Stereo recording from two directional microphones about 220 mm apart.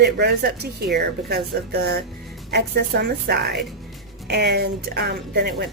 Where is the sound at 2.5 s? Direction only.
45° right (ahead or behind).